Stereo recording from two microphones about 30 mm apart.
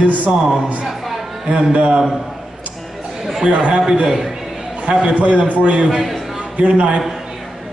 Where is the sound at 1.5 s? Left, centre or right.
Right.